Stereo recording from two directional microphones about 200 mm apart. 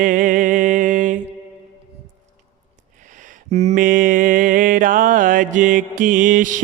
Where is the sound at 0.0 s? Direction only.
40° right (ahead or behind).